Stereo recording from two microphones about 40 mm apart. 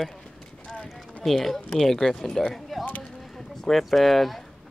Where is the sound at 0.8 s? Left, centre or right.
Centre.